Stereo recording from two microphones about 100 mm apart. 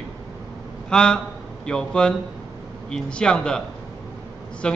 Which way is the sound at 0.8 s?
10° left (ahead or behind).